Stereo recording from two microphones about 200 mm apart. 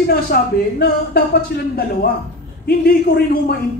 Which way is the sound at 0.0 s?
50° left (ahead or behind).